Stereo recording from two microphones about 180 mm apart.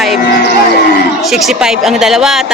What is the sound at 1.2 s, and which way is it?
A woman's voice, centre (ahead or behind).